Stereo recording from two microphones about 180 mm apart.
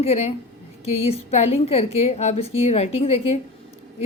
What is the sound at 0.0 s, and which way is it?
A woman's voice, 35° left (ahead or behind).